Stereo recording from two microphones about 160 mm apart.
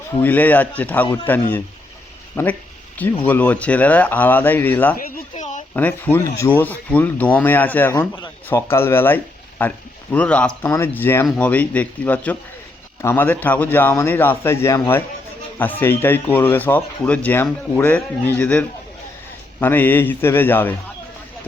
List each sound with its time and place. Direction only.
0.2 s speech: 10° left (ahead or behind)
4.9 s a sound: 55° left (ahead or behind)
5.7 s speech: 10° left (ahead or behind)